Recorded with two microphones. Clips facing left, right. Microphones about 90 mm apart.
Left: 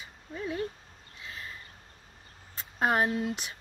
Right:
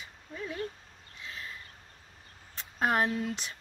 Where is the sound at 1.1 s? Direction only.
5° left (ahead or behind).